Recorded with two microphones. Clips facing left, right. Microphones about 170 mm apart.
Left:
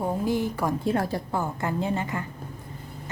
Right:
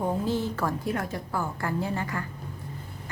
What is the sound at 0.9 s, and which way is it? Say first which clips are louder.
Speech: left 5 dB; 30° left (ahead or behind).